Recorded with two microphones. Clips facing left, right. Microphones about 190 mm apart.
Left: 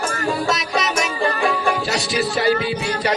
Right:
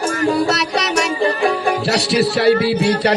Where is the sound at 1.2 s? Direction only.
35° right (ahead or behind).